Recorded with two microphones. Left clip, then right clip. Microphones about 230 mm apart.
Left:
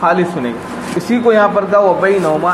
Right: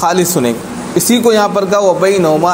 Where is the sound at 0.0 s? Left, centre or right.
Right.